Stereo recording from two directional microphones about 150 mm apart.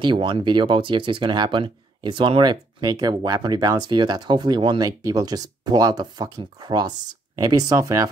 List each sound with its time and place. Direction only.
0.0 s speech: 35° right (ahead or behind)